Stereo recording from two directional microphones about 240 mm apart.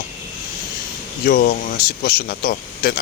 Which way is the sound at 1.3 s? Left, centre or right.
Left.